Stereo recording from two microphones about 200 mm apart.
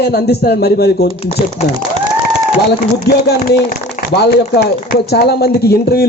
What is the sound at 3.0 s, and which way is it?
A man's voice, 55° left (ahead or behind).